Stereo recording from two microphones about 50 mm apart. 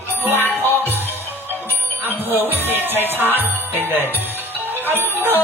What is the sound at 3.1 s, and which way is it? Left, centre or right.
Jingle bell, right.